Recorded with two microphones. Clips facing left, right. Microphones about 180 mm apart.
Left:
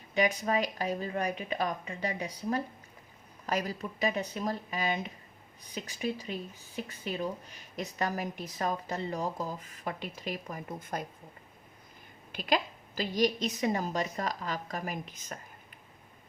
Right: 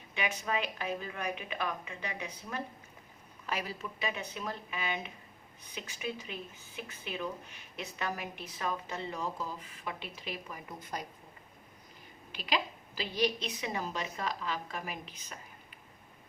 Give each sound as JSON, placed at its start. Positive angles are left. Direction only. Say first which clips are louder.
{"t": 0.1, "sound": "speech", "louder": "left 6 dB", "side_deg": 35}
{"t": 12.3, "sound": "a woman's voice", "louder": "left 4 dB", "side_deg": 50}